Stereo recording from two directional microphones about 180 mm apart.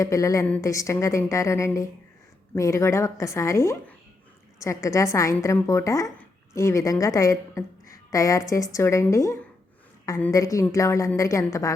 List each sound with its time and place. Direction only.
0.0 s a woman's voice: 15° left (ahead or behind)